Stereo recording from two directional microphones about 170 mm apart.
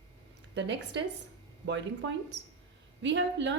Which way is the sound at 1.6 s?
90° right.